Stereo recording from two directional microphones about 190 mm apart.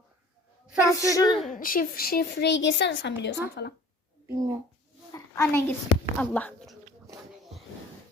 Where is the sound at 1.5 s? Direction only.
45° left (ahead or behind); by 3.7 s 60° left (ahead or behind).